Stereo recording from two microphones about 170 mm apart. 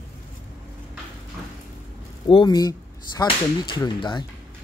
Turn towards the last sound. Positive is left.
turn(degrees=25)  # may be behind; listen again after turning